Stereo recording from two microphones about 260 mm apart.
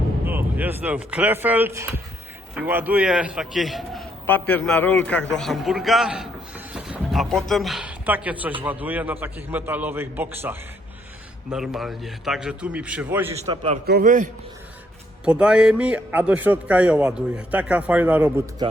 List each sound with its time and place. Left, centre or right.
0.3 s a man's voice: centre
13.4 s a man's voice: centre
13.8 s a man's voice: right
15.2 s a man's voice: centre